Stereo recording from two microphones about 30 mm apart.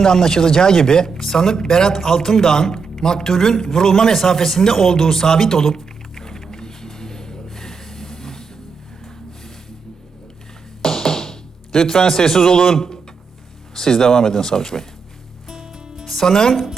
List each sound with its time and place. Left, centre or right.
0.0 s speech: centre
10.8 s music: centre
13.7 s speech: centre
15.6 s music: right
16.1 s speech: centre